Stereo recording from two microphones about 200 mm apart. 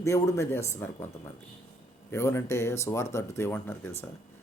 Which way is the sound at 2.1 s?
15° left (ahead or behind).